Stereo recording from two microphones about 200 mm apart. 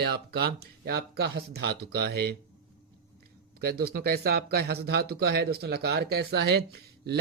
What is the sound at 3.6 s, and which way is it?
Speech, 50° right (ahead or behind).